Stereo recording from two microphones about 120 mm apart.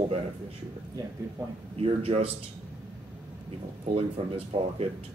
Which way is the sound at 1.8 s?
55° right (ahead or behind).